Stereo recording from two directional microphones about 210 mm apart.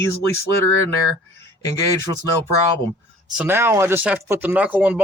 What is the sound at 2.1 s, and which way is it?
Speech, 20° right (ahead or behind).